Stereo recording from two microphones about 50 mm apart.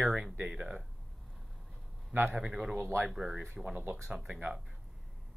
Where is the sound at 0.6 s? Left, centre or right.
Centre.